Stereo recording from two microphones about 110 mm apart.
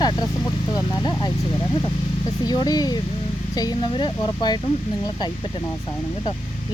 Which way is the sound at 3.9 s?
50° left (ahead or behind).